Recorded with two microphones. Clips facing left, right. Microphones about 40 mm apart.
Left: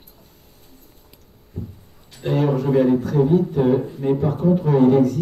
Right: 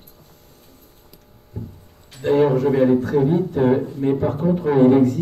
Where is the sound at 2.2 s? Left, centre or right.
Centre.